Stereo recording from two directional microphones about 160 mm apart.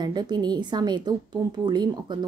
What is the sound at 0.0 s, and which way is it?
A woman's voice, 25° right (ahead or behind).